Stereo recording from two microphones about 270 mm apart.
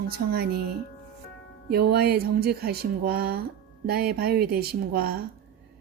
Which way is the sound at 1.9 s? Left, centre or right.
Right.